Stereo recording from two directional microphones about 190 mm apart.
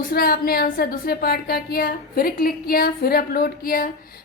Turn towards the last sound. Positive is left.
turn(degrees=50)  # may be behind; listen again after turning